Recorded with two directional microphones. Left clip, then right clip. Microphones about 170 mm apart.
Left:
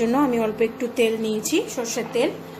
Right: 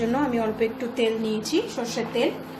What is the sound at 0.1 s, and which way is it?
A woman's voice, 55° left (ahead or behind).